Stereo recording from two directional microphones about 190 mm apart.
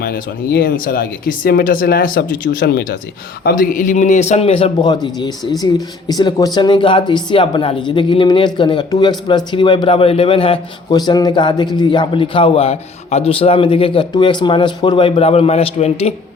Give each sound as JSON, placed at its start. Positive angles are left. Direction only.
{"t": 0.5, "sound": "a man's voice", "side_deg": 50}